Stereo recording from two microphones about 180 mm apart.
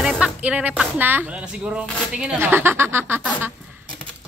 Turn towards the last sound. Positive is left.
turn(degrees=-10)  # may be behind; listen again after turning